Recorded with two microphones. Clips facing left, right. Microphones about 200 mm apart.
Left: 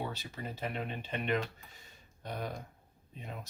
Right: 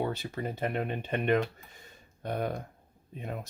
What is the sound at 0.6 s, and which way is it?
Speech, 55° right (ahead or behind).